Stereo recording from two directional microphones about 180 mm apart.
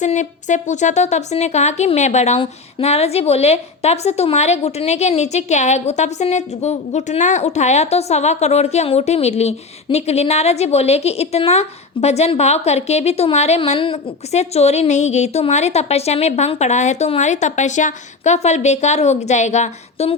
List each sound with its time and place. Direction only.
0.0 s a woman's voice: 40° left (ahead or behind)